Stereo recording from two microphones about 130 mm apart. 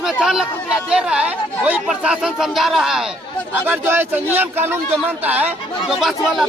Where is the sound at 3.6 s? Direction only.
15° right (ahead or behind).